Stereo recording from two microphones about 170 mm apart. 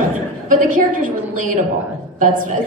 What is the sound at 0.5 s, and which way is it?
A man's voice, 50° right (ahead or behind).